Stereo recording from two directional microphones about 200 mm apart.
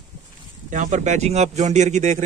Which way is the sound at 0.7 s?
40° right (ahead or behind).